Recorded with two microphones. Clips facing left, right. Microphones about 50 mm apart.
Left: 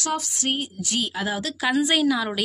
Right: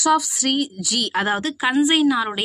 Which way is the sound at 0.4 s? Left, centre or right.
Right.